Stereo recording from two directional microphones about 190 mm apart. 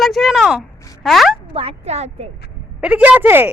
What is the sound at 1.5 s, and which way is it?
Speech, 30° right (ahead or behind).